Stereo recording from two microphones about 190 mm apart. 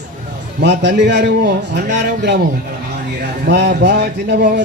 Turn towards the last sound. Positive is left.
turn(degrees=-55)  # may be behind; listen again after turning